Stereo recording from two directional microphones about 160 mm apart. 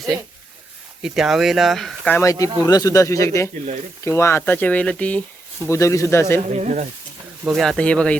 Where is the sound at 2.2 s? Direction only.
20° left (ahead or behind).